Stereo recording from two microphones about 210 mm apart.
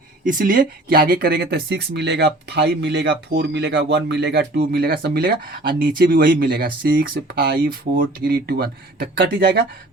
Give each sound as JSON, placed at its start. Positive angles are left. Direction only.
{"t": 0.3, "sound": "speech", "side_deg": -40}